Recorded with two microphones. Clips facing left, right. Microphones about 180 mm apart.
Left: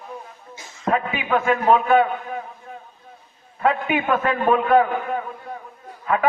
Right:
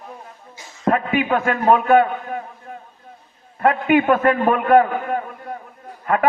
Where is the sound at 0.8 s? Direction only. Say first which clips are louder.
Right 4 dB; 55° right (ahead or behind).